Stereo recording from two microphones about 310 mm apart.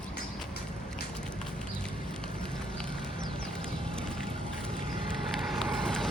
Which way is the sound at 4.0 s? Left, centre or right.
Centre.